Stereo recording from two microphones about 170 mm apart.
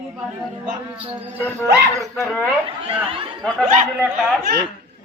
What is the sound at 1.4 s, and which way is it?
Speech, 10° left (ahead or behind).